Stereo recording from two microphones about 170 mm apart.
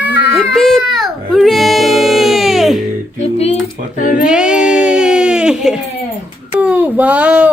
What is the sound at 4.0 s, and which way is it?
Speech, 50° left (ahead or behind).